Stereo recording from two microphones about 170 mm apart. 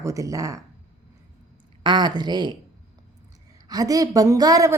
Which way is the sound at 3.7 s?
20° right (ahead or behind).